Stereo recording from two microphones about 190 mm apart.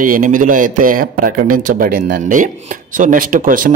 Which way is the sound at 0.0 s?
45° right (ahead or behind).